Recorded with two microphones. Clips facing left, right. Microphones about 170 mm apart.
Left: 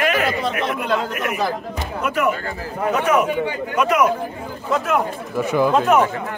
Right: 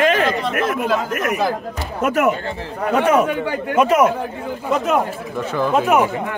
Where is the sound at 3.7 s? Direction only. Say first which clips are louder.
Right 3 dB; 30° right (ahead or behind).